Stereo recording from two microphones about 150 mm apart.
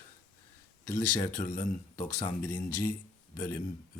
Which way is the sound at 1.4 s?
80° left.